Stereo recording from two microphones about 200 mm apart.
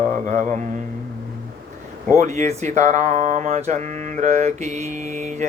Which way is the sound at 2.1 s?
35° right (ahead or behind).